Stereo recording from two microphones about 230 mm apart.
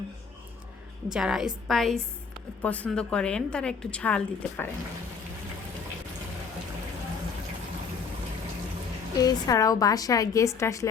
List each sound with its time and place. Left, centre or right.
1.1 s a woman's voice: centre
9.1 s a woman's voice: centre